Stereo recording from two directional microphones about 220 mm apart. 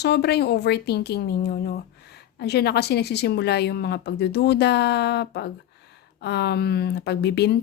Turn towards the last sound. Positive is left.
turn(degrees=50)  # may be behind; listen again after turning